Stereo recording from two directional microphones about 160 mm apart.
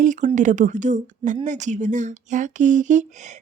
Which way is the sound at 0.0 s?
50° right (ahead or behind).